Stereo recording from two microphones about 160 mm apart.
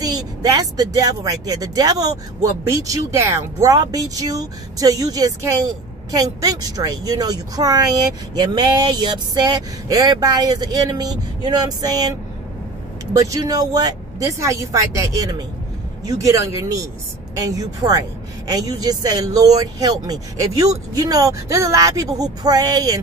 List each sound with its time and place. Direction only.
0.0 s speech: 25° right (ahead or behind)